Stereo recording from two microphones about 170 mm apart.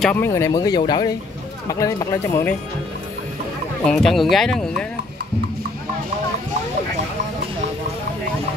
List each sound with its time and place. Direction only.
0.0 s speech: 10° left (ahead or behind)
3.8 s speech: centre (ahead or behind)